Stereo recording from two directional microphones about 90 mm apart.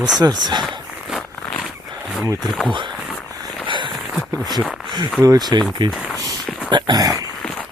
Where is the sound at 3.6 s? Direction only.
65° right (ahead or behind).